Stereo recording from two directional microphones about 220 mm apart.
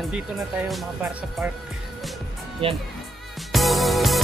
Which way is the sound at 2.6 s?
25° right (ahead or behind).